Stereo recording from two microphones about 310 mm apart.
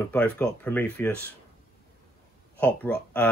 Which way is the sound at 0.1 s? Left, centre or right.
Centre.